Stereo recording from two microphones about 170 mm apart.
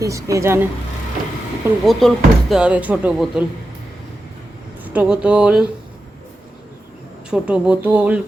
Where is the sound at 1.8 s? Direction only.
Centre (ahead or behind).